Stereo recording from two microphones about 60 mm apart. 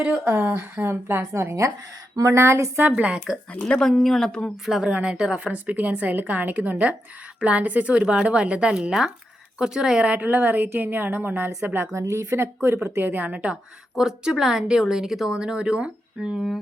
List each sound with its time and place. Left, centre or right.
0.3 s speech: right
1.3 s a woman's voice: right
2.9 s a woman's voice: centre
3.6 s speech: centre
4.6 s a woman's voice: centre
10.2 s speech: right
11.9 s a woman's voice: right
12.6 s speech: right
13.9 s speech: centre